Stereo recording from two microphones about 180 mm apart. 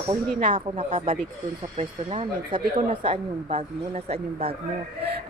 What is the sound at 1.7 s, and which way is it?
Speech, 30° right (ahead or behind).